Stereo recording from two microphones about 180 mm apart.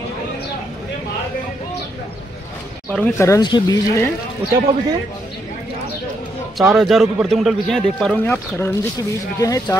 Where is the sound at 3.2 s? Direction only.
20° left (ahead or behind).